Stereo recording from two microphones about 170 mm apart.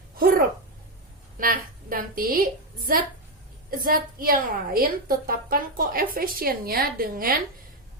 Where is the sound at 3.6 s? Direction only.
60° right (ahead or behind).